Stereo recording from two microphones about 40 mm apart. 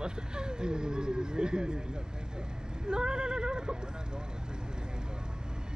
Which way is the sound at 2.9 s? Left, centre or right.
Right.